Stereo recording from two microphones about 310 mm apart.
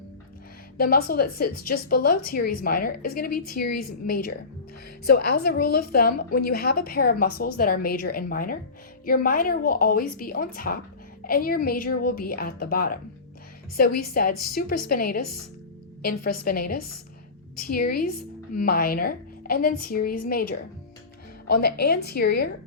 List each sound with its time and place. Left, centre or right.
0.8 s a woman's voice: left
16.4 s a woman's voice: left